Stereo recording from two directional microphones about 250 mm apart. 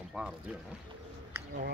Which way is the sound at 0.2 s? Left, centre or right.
Centre.